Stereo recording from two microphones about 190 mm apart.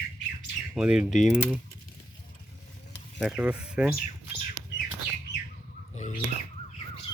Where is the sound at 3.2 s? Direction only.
5° right (ahead or behind).